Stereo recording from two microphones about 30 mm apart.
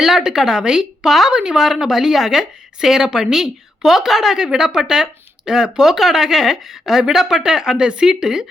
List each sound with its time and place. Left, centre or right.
0.0 s a woman's voice: centre
1.0 s a woman's voice: centre
1.3 s a woman's voice: right
1.5 s a woman's voice: centre
5.8 s speech: centre
7.8 s speech: right
8.0 s a woman's voice: centre